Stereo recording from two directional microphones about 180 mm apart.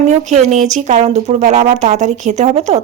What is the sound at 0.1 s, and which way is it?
A woman's voice, 40° right (ahead or behind).